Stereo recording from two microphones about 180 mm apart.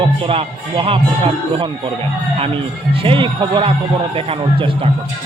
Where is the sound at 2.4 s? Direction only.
30° right (ahead or behind).